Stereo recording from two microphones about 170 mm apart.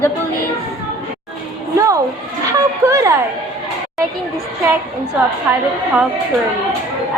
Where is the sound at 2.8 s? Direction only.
15° right (ahead or behind).